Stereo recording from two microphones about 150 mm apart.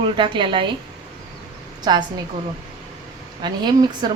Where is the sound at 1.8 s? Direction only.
30° right (ahead or behind).